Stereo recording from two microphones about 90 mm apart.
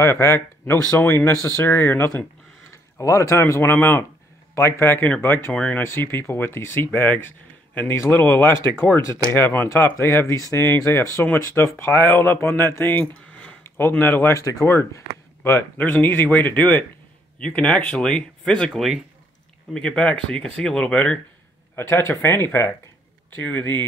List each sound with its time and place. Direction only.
0.0 s speech: 30° left (ahead or behind)
5.5 s speech: 15° left (ahead or behind)
5.8 s speech: 25° left (ahead or behind)
13.0 s a sound: 15° left (ahead or behind)
13.7 s speech: 25° left (ahead or behind)
14.3 s speech: 40° left (ahead or behind)
15.8 s speech: 20° left (ahead or behind)
18.7 s speech: centre (ahead or behind)
19.7 s speech: 10° left (ahead or behind)
21.7 s speech: 25° left (ahead or behind)